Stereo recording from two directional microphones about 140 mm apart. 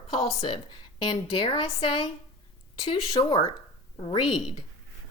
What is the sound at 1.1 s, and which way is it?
A woman's voice, 40° left (ahead or behind).